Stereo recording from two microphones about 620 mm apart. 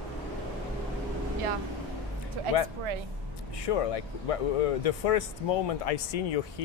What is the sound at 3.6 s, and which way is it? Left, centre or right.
Speech, left.